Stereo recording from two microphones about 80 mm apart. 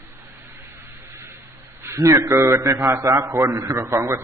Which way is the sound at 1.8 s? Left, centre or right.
Right.